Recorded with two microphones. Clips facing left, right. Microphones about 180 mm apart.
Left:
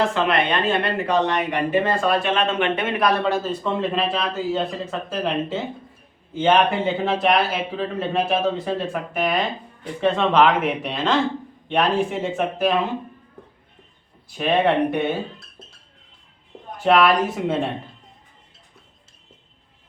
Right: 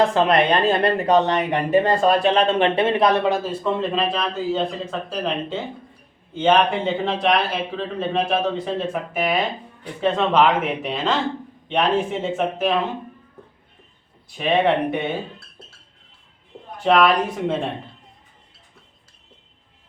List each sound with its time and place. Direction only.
0.1 s speech: 35° right (ahead or behind)
3.2 s speech: 15° right (ahead or behind)
14.3 s speech: centre (ahead or behind)
16.8 s speech: 5° left (ahead or behind)